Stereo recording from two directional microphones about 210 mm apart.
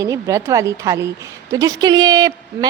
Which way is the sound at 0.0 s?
15° right (ahead or behind).